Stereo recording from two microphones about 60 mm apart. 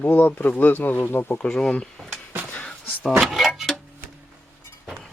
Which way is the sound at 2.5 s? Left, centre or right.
Centre.